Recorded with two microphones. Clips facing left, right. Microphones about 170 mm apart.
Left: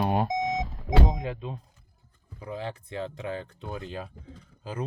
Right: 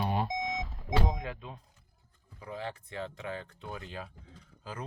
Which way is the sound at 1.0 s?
25° left (ahead or behind).